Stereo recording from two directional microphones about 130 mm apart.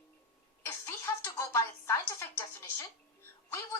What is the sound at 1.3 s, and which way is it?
Speech, 20° left (ahead or behind).